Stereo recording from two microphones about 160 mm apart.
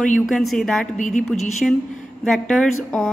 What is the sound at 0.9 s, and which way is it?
Speech, 50° left (ahead or behind).